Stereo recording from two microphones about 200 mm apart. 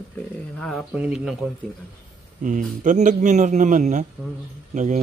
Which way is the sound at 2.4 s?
40° right (ahead or behind).